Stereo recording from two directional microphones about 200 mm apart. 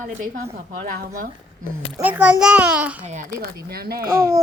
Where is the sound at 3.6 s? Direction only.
50° right (ahead or behind).